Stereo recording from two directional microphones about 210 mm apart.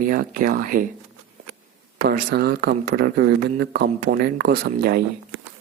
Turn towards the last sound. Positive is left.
turn(degrees=-45)  # may be behind; listen again after turning